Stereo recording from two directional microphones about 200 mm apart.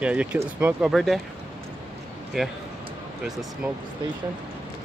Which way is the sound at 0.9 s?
Centre (ahead or behind).